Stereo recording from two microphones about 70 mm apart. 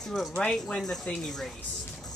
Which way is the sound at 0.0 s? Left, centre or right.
Centre.